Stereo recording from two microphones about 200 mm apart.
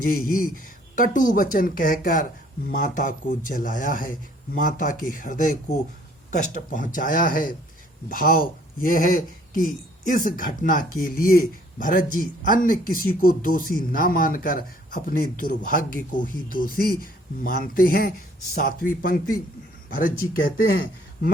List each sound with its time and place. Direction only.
0.0 s speech: 45° left (ahead or behind)